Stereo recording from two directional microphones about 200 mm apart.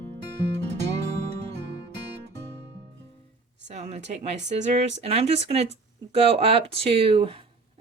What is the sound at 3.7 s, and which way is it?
Speech, 35° right (ahead or behind).